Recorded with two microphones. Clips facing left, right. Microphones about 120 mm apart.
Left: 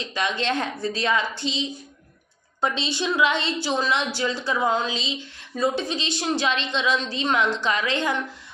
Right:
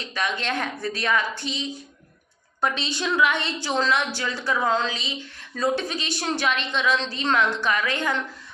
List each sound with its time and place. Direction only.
0.1 s a woman's voice: 25° left (ahead or behind)
6.9 s a woman's voice: 15° left (ahead or behind)